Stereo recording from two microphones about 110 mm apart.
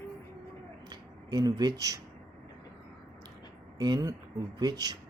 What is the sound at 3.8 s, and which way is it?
Speech, 40° right (ahead or behind).